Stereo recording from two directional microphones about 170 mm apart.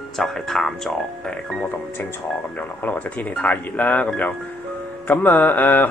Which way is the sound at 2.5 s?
10° left (ahead or behind).